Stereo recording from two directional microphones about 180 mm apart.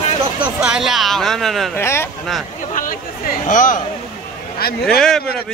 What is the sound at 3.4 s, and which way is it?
Speech, 45° left (ahead or behind).